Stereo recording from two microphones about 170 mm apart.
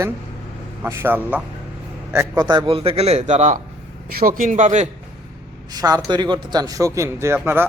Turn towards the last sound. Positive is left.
turn(degrees=-10)  # may be behind; listen again after turning